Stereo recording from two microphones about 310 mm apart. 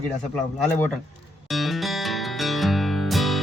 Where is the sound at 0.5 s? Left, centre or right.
Centre.